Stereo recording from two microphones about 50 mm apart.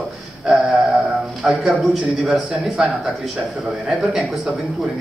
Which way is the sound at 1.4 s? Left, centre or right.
Centre.